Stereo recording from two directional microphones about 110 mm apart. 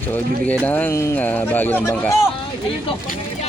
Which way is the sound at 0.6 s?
15° left (ahead or behind).